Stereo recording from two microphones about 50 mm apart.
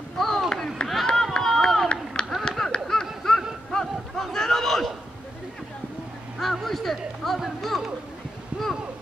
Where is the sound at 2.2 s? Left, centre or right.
Centre.